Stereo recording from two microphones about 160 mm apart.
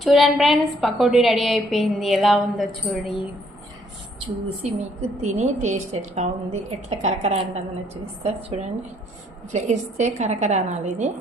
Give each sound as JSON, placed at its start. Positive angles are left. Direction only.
{"t": 0.0, "sound": "a woman's voice", "side_deg": 0}
{"t": 4.2, "sound": "a woman's voice", "side_deg": -40}